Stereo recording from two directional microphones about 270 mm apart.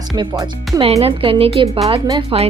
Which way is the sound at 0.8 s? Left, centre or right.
Right.